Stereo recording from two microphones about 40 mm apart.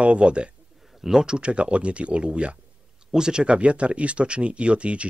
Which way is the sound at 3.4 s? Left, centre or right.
Right.